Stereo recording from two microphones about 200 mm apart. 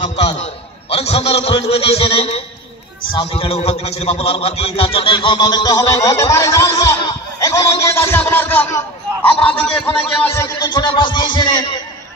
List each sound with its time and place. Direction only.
0.4 s a man's voice: 30° left (ahead or behind)